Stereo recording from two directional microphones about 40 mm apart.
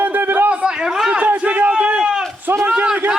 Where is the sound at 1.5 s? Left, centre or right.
Right.